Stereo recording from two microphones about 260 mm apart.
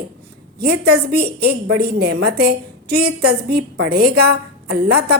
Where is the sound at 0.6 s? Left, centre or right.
Right.